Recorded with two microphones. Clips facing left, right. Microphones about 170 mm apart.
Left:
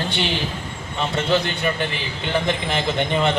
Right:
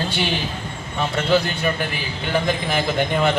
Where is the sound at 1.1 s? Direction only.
Centre (ahead or behind).